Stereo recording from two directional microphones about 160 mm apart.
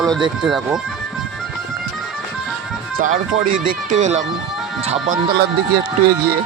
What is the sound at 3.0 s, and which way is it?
Speech, 55° right (ahead or behind).